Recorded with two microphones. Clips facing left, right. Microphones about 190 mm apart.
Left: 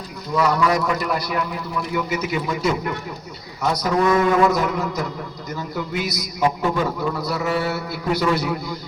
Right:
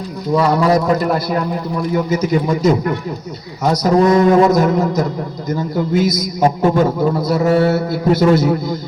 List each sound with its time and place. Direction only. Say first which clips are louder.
0.3 s a man's voice: right 5 dB; 35° right (ahead or behind)